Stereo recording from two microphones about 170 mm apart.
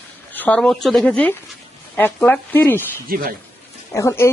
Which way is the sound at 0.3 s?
10° left (ahead or behind).